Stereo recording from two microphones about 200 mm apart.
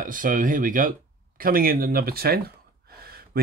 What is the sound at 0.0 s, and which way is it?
Speech, 40° right (ahead or behind).